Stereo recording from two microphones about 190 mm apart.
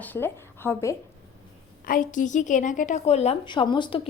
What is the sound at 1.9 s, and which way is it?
A woman's voice, 45° left (ahead or behind).